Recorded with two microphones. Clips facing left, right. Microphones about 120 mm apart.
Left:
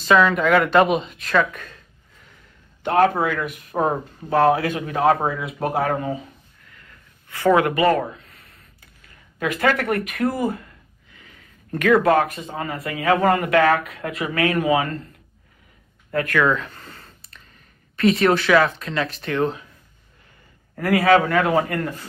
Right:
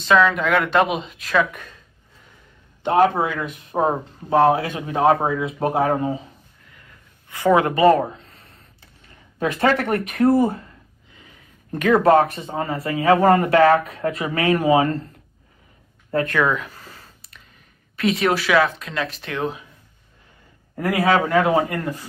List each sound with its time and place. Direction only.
0.0 s speech: centre (ahead or behind)
2.8 s speech: 20° right (ahead or behind)
6.7 s a sound: 20° right (ahead or behind)
11.1 s speech: 20° right (ahead or behind)
16.1 s speech: 25° right (ahead or behind)
16.4 s a sound: 5° right (ahead or behind)
17.9 s speech: centre (ahead or behind)
20.7 s speech: 20° right (ahead or behind)